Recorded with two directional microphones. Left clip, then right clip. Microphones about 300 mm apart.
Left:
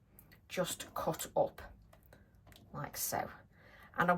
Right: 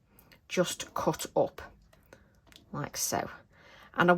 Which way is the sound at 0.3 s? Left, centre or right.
Right.